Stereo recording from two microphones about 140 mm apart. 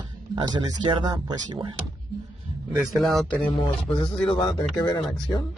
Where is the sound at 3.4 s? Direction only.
40° left (ahead or behind).